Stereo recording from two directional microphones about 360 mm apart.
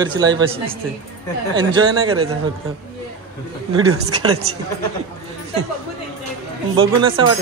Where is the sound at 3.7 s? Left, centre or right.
Right.